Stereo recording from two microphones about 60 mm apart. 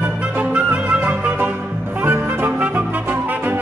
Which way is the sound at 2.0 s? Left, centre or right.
Right.